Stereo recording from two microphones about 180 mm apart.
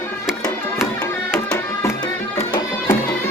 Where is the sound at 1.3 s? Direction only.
10° left (ahead or behind).